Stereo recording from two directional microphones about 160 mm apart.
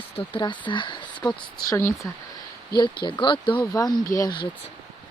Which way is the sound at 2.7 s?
75° left (ahead or behind).